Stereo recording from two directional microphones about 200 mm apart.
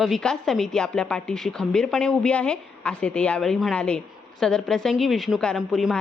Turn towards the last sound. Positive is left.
turn(degrees=0)  # may be behind; listen again after turning